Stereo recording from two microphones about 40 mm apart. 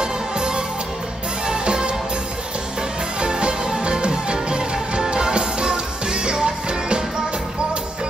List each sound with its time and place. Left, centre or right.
0.0 s music: right
3.2 s music: right